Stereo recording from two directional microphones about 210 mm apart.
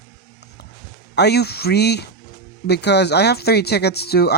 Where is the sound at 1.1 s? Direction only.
50° left (ahead or behind).